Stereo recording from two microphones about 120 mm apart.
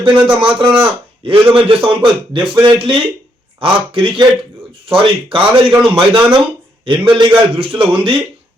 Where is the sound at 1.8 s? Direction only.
45° right (ahead or behind).